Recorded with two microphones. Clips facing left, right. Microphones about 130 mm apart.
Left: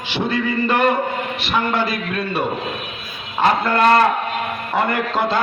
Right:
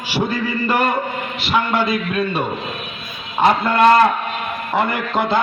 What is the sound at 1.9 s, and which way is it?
Speech, 25° right (ahead or behind).